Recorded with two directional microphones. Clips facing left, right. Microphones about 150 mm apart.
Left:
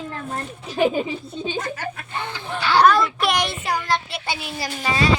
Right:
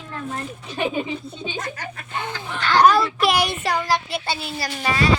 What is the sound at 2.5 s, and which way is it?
Speech, 10° left (ahead or behind).